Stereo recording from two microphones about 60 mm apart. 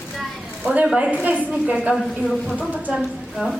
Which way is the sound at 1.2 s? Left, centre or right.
Right.